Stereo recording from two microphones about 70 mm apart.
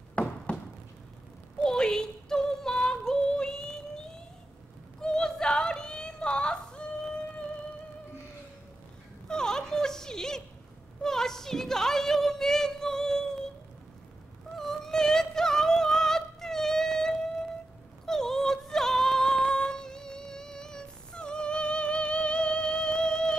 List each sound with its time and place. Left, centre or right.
0.1 s a sound: centre
1.6 s yodeling: centre
5.0 s yodeling: centre
9.3 s a sound: centre
14.6 s music: centre
18.0 s female singing: centre